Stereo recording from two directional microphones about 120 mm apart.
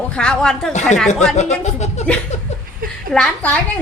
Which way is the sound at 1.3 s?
70° left (ahead or behind).